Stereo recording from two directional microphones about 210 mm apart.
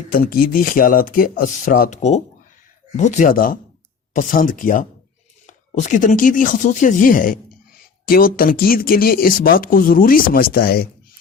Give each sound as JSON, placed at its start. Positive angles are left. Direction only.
{"t": 0.1, "sound": "speech", "side_deg": 45}